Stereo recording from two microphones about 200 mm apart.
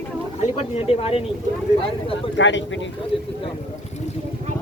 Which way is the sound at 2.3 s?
65° left (ahead or behind).